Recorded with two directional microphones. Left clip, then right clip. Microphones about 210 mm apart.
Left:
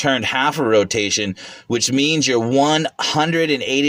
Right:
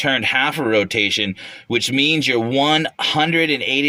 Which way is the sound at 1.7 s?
10° left (ahead or behind).